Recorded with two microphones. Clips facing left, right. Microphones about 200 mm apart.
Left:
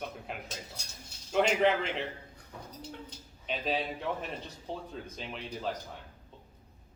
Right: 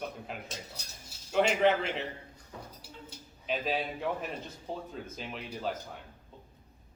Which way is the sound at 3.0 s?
5° right (ahead or behind).